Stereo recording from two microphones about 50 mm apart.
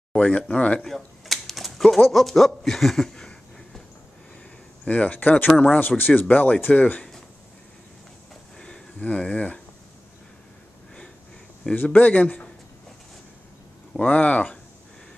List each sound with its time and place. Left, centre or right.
0.1 s speech: left
0.7 s typewriter: centre
2.0 s speech: centre
4.8 s speech: left
8.5 s a sound: centre
9.0 s speech: left
11.7 s speech: left
13.9 s speech: left